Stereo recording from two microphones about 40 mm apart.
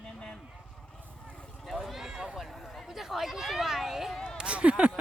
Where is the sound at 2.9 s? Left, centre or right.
Centre.